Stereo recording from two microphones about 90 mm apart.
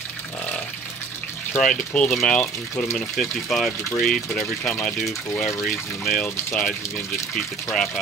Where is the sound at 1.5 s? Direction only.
10° left (ahead or behind).